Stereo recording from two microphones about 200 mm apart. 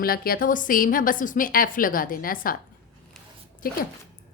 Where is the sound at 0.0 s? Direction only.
50° left (ahead or behind).